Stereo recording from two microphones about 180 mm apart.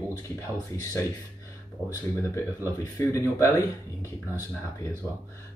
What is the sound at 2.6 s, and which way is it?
Speech, 15° left (ahead or behind).